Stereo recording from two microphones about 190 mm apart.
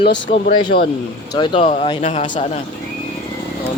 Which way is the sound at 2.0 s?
40° left (ahead or behind).